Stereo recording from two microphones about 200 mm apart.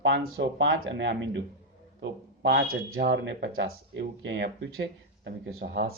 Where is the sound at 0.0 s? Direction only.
65° right (ahead or behind).